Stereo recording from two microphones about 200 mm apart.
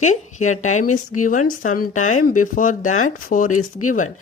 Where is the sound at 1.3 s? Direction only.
40° left (ahead or behind).